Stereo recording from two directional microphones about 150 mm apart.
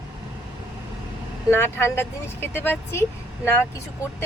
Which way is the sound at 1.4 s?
15° left (ahead or behind).